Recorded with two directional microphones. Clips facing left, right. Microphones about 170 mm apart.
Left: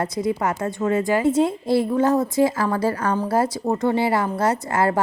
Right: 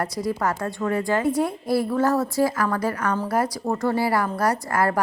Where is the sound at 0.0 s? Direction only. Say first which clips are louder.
Left 2 dB; 20° left (ahead or behind).